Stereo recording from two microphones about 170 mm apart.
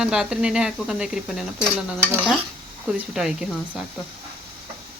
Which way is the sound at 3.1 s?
5° right (ahead or behind).